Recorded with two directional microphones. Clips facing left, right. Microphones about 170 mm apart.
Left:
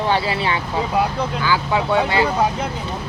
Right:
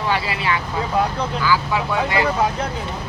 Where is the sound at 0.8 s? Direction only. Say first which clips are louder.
Left 2 dB; 10° left (ahead or behind).